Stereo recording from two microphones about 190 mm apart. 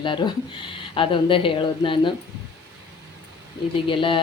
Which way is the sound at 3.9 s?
25° left (ahead or behind).